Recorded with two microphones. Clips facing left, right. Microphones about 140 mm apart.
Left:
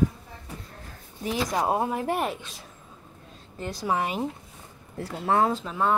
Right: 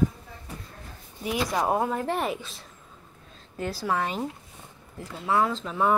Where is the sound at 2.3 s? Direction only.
Centre (ahead or behind).